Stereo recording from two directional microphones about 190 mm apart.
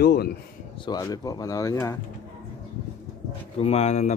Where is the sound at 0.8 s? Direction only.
20° left (ahead or behind).